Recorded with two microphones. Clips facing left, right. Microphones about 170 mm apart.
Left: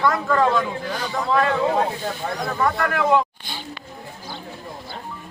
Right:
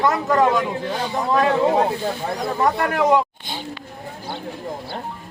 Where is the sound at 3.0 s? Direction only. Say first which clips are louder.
Right 1 dB; 20° right (ahead or behind).